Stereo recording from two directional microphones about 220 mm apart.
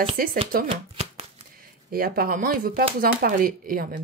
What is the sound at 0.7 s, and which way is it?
Speech, 25° right (ahead or behind).